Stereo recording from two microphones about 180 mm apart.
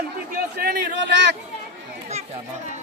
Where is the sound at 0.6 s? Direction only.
65° right (ahead or behind).